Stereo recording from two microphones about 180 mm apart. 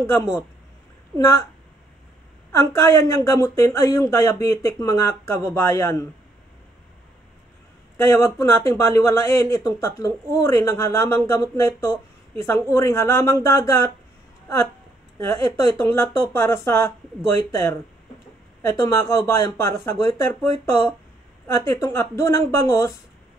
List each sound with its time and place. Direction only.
0.0 s speech: 15° left (ahead or behind)
2.5 s speech: 15° left (ahead or behind)
8.0 s speech: 15° left (ahead or behind)
15.1 s speech: 15° left (ahead or behind)
21.5 s speech: 15° left (ahead or behind)